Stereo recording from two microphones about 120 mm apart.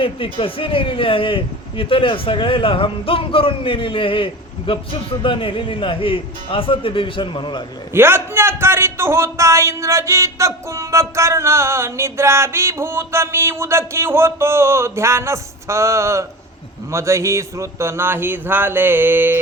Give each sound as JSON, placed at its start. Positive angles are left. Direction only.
{"t": 0.0, "sound": "a man's voice", "side_deg": 50}
{"t": 7.9, "sound": "a man's voice", "side_deg": -20}